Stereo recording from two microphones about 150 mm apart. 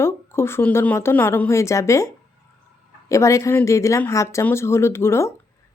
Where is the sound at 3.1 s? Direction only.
20° left (ahead or behind).